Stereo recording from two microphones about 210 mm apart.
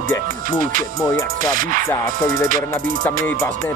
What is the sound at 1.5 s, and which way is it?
Music, 40° right (ahead or behind).